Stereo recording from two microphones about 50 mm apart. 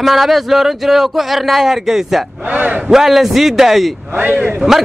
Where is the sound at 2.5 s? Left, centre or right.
Right.